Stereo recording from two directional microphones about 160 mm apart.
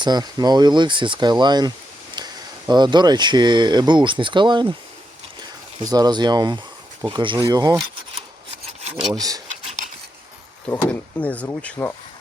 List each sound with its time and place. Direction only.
0.0 s speech: 25° right (ahead or behind)
8.8 s filing: 35° right (ahead or behind)
9.1 s speech: 20° right (ahead or behind)
11.2 s speech: 10° left (ahead or behind)